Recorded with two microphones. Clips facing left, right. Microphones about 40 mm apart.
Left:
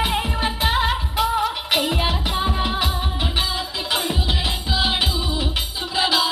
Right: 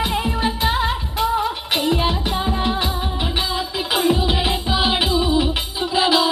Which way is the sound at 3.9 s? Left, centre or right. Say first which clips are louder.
Right 7 dB; centre.